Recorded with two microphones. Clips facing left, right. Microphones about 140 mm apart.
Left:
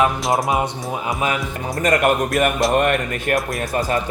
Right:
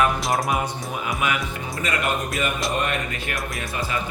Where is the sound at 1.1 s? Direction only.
35° left (ahead or behind).